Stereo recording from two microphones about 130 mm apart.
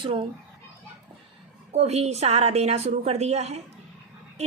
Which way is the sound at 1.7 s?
55° right (ahead or behind).